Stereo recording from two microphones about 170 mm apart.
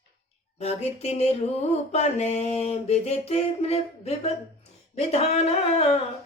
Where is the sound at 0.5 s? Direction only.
40° left (ahead or behind).